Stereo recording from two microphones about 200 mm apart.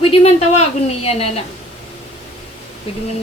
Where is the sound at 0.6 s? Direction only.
30° left (ahead or behind).